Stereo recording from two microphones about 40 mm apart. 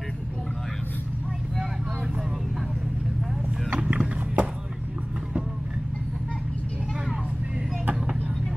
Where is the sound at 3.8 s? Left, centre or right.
Right.